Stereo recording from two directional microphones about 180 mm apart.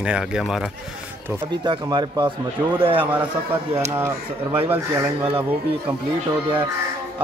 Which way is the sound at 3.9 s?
15° right (ahead or behind).